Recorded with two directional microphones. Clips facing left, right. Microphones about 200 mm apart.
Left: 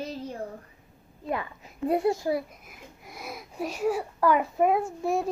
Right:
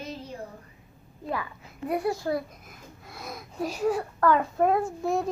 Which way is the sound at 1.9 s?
25° left (ahead or behind).